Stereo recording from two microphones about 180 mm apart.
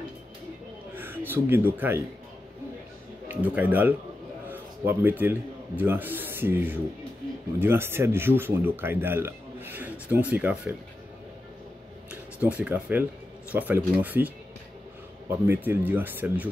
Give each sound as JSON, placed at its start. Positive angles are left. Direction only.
{"t": 0.9, "sound": "a man's voice", "side_deg": -10}
{"t": 3.3, "sound": "speech", "side_deg": -10}
{"t": 12.1, "sound": "speech", "side_deg": -5}